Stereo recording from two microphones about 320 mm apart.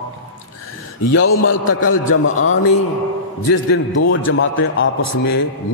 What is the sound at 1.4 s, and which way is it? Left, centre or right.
Speech, left.